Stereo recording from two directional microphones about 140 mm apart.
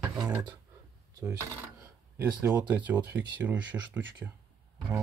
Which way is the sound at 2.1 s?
15° right (ahead or behind).